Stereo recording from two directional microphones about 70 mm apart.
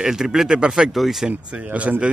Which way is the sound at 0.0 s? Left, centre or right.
Centre.